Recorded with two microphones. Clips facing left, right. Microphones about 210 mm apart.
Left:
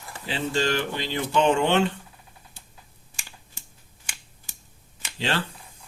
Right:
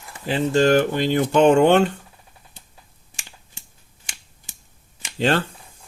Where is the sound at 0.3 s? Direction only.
50° right (ahead or behind).